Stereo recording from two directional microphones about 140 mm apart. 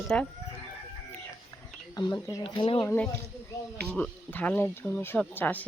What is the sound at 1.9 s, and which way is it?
Speech, 30° left (ahead or behind).